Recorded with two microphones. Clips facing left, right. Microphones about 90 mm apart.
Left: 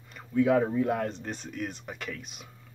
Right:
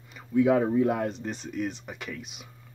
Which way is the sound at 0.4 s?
20° right (ahead or behind).